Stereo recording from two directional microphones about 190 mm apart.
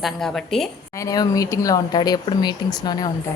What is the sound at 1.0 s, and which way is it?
Speech, 20° left (ahead or behind).